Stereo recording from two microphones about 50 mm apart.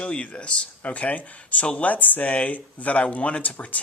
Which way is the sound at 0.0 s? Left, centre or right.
Left.